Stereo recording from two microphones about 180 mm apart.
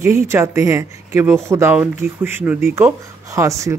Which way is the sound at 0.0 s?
15° right (ahead or behind).